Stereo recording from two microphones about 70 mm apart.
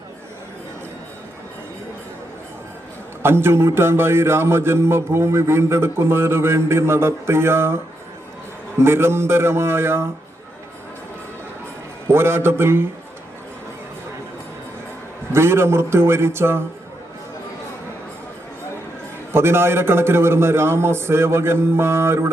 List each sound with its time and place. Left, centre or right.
3.2 s a man's voice: right
8.8 s a man's voice: right
12.0 s a man's voice: right
15.3 s a man's voice: right
19.3 s a man's voice: right